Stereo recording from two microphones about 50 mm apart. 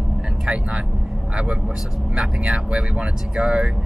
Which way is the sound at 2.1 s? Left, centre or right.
Right.